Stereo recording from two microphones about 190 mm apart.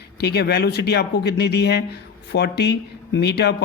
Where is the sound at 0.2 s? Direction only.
60° left (ahead or behind).